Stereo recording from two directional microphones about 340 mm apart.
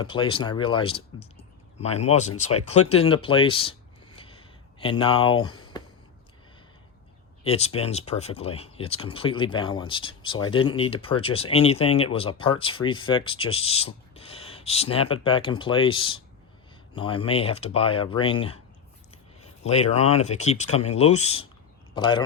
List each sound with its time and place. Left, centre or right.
0.0 s speech: centre
5.7 s a sound: centre
7.4 s speech: centre